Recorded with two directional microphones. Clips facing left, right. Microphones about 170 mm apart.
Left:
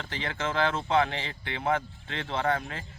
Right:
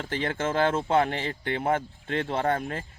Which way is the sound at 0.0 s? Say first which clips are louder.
Right 5 dB; 50° right (ahead or behind).